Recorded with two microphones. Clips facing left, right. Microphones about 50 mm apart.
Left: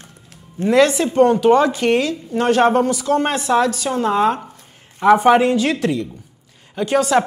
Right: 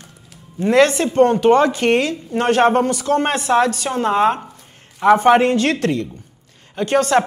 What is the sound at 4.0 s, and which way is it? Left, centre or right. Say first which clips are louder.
Speech: right 1 dB; centre.